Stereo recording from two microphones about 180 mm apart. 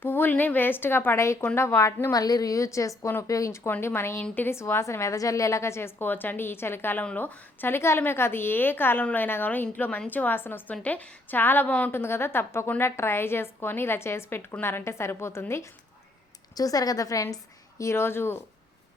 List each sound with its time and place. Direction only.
0.0 s a woman's voice: 10° left (ahead or behind)